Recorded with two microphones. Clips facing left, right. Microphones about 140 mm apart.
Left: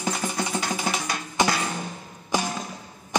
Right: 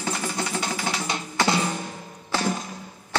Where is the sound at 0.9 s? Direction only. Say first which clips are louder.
Left 3 dB; 25° right (ahead or behind).